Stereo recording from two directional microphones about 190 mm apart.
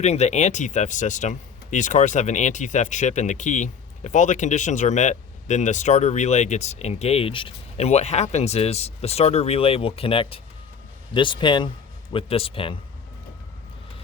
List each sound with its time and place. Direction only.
0.0 s speech: 35° left (ahead or behind)